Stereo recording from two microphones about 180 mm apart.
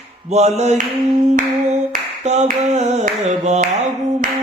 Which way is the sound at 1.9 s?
40° right (ahead or behind).